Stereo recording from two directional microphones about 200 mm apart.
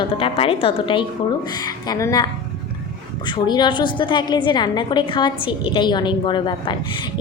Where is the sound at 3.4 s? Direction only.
20° left (ahead or behind).